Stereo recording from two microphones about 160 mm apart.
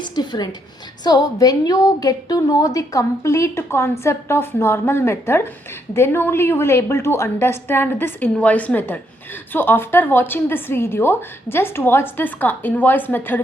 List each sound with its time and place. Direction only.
0.0 s a woman's voice: 25° left (ahead or behind)